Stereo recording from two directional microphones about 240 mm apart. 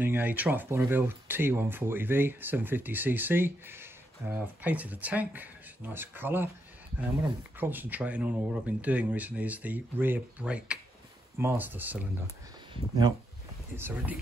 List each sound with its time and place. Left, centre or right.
0.0 s speech: centre
7.5 s speech: centre
13.7 s speech: centre